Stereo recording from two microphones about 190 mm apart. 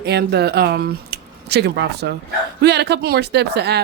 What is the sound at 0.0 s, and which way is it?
Speech, 60° right (ahead or behind).